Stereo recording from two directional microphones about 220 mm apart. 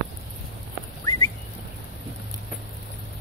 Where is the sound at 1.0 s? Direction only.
15° left (ahead or behind).